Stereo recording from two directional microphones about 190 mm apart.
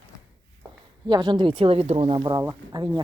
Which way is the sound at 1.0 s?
25° right (ahead or behind).